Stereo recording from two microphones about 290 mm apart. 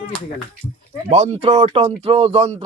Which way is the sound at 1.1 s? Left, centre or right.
Right.